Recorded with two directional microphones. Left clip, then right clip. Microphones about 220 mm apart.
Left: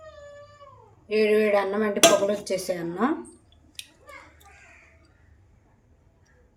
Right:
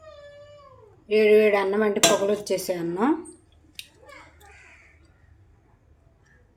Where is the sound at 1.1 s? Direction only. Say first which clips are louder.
Right 3 dB; 20° right (ahead or behind).